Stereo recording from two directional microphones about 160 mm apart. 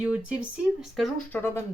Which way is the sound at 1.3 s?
15° left (ahead or behind).